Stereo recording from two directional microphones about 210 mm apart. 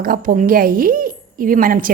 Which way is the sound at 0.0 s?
40° right (ahead or behind).